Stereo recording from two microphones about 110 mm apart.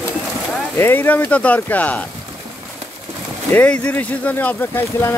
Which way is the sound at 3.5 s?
10° left (ahead or behind).